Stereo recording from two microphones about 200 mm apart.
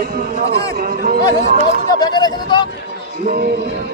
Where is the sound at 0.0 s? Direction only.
50° right (ahead or behind).